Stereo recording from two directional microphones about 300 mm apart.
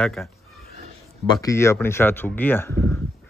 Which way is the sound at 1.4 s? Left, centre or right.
Centre.